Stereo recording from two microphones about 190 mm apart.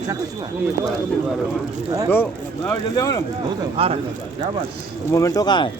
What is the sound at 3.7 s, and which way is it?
Speech, 30° right (ahead or behind).